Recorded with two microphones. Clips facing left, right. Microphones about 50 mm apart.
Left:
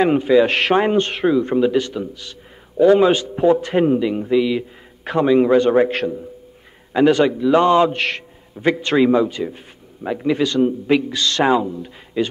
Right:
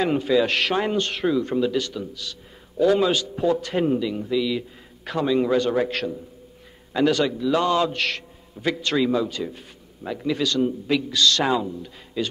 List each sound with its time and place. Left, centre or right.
0.0 s a man's voice: left